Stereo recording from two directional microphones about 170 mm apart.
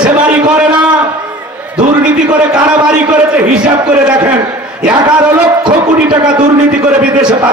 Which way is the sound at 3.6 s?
25° right (ahead or behind).